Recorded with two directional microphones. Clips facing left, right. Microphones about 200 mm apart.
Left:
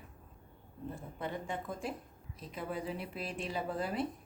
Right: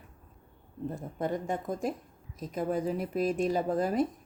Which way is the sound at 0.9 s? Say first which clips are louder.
Right 8 dB; 45° right (ahead or behind).